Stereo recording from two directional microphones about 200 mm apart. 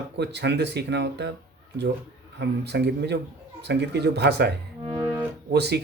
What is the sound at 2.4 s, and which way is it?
Speech, 60° right (ahead or behind).